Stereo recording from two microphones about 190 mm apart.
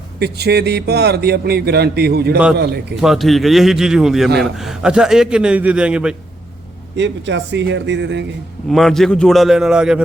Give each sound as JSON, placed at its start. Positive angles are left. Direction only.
{"t": 0.2, "sound": "speech", "side_deg": -60}
{"t": 3.0, "sound": "a man's voice", "side_deg": 0}
{"t": 6.9, "sound": "speech", "side_deg": -70}
{"t": 8.7, "sound": "a man's voice", "side_deg": 0}